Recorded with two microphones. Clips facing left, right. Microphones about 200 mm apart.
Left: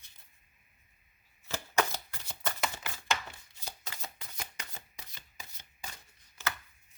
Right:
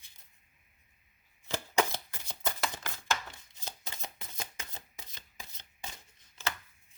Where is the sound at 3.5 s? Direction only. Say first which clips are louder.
Right 3 dB; 20° right (ahead or behind).